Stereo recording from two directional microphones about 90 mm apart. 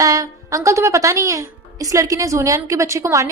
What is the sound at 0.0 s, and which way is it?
A woman's voice, 40° right (ahead or behind).